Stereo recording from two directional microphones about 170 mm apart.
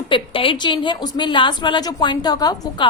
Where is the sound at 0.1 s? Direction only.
30° left (ahead or behind).